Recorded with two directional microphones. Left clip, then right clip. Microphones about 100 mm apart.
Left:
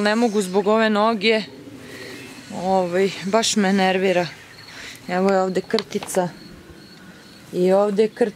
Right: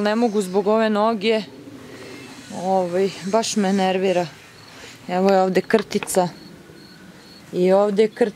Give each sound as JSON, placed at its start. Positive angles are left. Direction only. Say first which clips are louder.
{"t": 0.0, "sound": "speech", "louder": "left 1 dB", "side_deg": 0}
{"t": 2.5, "sound": "speech", "louder": "even", "side_deg": 10}
{"t": 4.8, "sound": "a sound", "louder": "right 1 dB", "side_deg": -5}
{"t": 6.0, "sound": "speech", "louder": "right 2 dB", "side_deg": -20}
{"t": 7.5, "sound": "speech", "louder": "right 1 dB", "side_deg": -5}